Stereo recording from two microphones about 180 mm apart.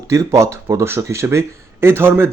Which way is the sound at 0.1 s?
15° right (ahead or behind).